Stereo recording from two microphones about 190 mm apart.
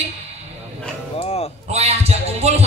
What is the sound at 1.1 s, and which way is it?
Music, 35° left (ahead or behind).